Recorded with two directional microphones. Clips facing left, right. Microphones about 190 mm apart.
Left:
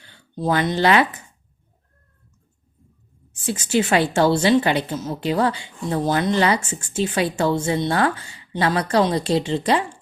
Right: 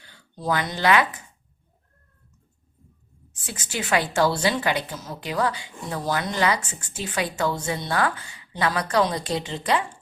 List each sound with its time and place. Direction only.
0.3 s a woman's voice: 25° left (ahead or behind)
3.4 s a woman's voice: 25° left (ahead or behind)